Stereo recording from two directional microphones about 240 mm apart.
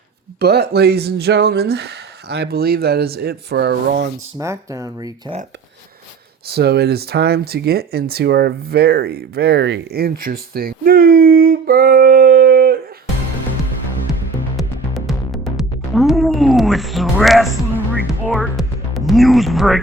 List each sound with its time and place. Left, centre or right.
0.3 s speech: right
4.4 s speech: centre
6.5 s speech: right
14.5 s music: centre
18.3 s speech: centre